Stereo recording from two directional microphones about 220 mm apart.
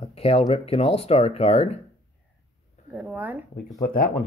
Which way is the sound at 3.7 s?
40° left (ahead or behind).